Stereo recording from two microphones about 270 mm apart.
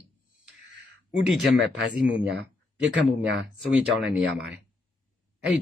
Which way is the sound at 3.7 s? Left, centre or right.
Centre.